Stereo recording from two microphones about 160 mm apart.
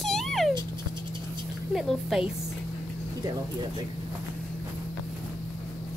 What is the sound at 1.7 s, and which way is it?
Speech, centre (ahead or behind).